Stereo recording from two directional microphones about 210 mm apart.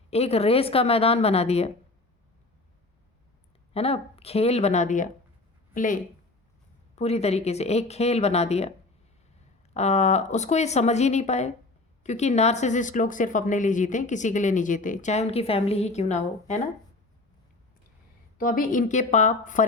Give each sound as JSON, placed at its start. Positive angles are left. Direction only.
{"t": 0.1, "sound": "a woman's voice", "side_deg": 30}
{"t": 3.8, "sound": "a woman's voice", "side_deg": 30}
{"t": 9.7, "sound": "a woman's voice", "side_deg": 30}
{"t": 18.3, "sound": "a woman's voice", "side_deg": 40}